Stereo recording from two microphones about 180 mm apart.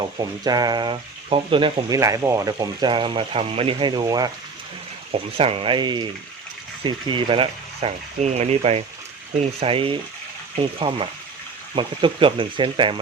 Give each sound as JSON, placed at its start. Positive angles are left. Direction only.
{"t": 0.0, "sound": "speech", "side_deg": -20}
{"t": 2.0, "sound": "speech", "side_deg": -15}